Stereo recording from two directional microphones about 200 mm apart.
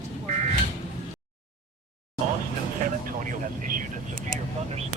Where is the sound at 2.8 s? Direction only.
40° right (ahead or behind).